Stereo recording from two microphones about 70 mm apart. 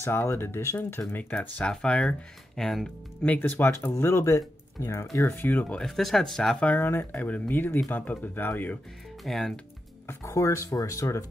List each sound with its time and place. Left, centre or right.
0.0 s speech: left
1.7 s speech: centre
3.3 s speech: left
5.1 s speech: left
5.8 s speech: centre
6.8 s speech: left
7.1 s speech: left
9.2 s speech: centre
10.0 s speech: left